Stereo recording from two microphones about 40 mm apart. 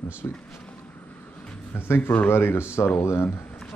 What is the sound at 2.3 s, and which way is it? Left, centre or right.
Speech, left.